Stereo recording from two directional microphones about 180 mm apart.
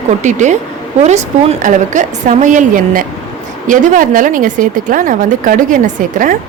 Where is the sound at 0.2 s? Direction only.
40° right (ahead or behind).